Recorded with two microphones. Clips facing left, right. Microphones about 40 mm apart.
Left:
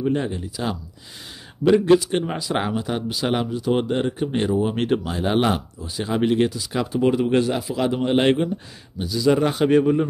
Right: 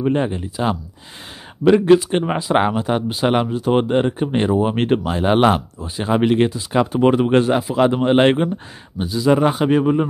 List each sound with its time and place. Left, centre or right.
0.0 s speech: right
6.9 s a man's voice: right; by 9.8 s centre